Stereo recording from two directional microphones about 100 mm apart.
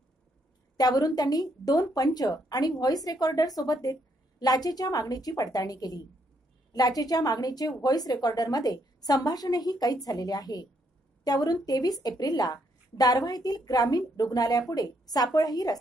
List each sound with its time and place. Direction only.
0.7 s a woman's voice: 40° left (ahead or behind)